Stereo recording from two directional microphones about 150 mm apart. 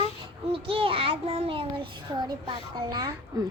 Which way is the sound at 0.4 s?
35° right (ahead or behind).